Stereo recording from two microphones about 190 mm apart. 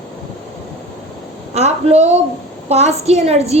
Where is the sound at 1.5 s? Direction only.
35° right (ahead or behind).